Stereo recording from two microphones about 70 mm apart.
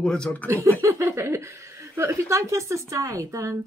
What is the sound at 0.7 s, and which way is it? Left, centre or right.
Speech, right.